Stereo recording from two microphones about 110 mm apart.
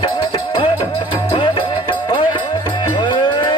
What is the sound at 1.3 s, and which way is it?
Music, 50° left (ahead or behind).